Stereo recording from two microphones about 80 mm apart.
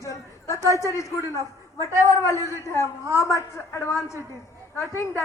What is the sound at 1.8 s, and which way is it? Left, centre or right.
A man's voice, left.